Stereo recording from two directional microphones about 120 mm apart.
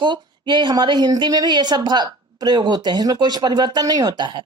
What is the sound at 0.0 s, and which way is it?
A woman's voice, 40° right (ahead or behind).